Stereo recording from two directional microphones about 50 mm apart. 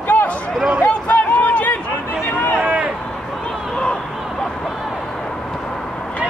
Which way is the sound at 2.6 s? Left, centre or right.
Right.